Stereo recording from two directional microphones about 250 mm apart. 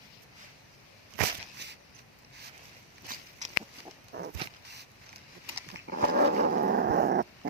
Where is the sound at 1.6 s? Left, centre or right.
Right.